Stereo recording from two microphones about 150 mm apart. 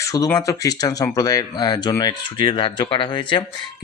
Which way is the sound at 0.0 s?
20° left (ahead or behind).